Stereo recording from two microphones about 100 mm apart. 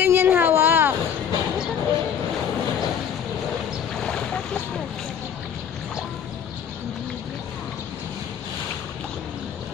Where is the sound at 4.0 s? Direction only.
10° left (ahead or behind).